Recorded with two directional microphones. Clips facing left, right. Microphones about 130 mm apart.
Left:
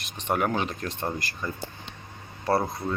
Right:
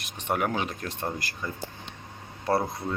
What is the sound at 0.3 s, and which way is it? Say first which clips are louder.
Speech: left 2 dB; 5° right (ahead or behind).